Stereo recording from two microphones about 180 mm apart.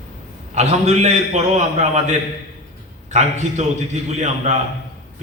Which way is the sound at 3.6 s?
45° right (ahead or behind).